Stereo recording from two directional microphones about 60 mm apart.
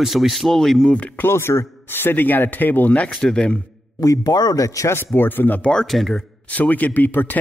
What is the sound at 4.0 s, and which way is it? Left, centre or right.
Speech, left.